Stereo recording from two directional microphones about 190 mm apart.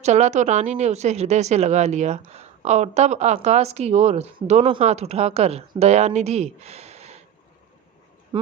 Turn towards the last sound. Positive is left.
turn(degrees=-35)  # may be behind; listen again after turning